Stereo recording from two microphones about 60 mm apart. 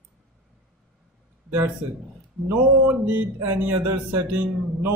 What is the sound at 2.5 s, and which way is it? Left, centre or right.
Speech, right.